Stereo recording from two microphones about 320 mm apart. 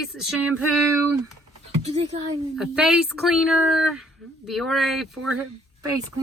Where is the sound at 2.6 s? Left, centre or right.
Centre.